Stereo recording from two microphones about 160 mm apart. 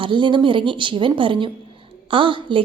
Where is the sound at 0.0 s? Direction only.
30° right (ahead or behind).